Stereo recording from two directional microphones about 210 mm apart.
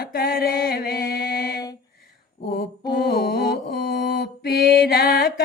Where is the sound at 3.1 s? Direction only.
50° left (ahead or behind).